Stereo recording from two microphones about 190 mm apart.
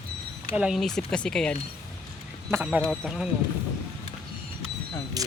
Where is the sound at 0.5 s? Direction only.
5° right (ahead or behind).